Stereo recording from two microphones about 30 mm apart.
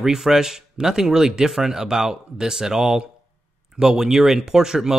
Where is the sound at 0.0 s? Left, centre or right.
Centre.